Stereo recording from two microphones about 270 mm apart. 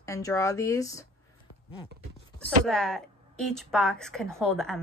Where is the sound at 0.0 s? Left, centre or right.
Centre.